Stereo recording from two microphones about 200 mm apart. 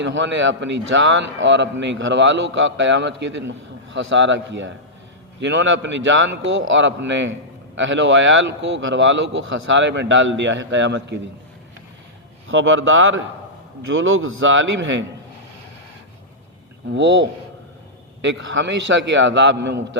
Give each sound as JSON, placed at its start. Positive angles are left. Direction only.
{"t": 0.0, "sound": "a man's voice", "side_deg": -65}
{"t": 12.5, "sound": "a man's voice", "side_deg": -80}
{"t": 16.9, "sound": "a man's voice", "side_deg": -65}